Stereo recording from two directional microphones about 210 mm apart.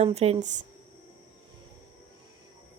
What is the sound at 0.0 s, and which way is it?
Speech, 30° right (ahead or behind).